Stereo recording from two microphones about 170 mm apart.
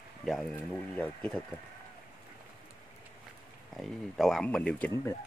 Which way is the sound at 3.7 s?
Centre (ahead or behind).